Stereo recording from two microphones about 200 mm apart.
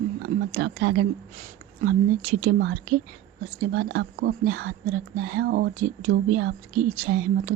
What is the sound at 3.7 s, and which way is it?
Speech, 55° right (ahead or behind).